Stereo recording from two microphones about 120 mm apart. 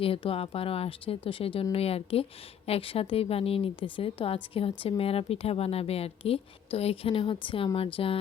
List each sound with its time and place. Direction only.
0.0 s a woman's voice: 50° left (ahead or behind)